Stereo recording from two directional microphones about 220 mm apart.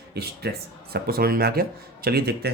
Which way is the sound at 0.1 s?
45° right (ahead or behind).